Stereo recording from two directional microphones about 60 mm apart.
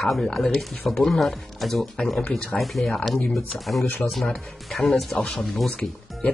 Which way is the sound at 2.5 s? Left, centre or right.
Centre.